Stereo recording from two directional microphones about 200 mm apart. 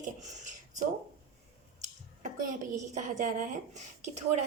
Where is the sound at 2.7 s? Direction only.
35° right (ahead or behind).